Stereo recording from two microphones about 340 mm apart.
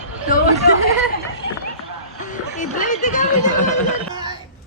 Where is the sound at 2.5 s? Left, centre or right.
Left.